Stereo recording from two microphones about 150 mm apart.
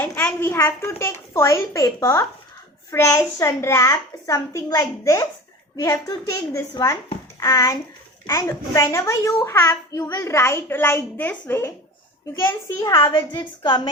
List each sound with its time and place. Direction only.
0.0 s a woman's voice: 15° left (ahead or behind)
13.1 s a woman's voice: 35° left (ahead or behind)